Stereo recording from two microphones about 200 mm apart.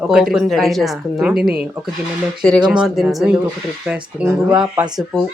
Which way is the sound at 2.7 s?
Centre (ahead or behind).